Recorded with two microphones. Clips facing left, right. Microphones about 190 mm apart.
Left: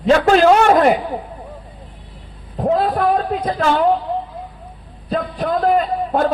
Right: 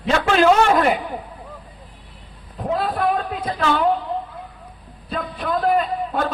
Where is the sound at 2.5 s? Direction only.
45° left (ahead or behind).